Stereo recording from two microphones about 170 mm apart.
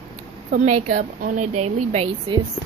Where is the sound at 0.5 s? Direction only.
50° right (ahead or behind).